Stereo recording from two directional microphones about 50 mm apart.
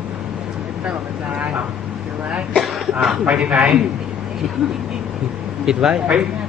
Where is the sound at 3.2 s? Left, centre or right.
Right.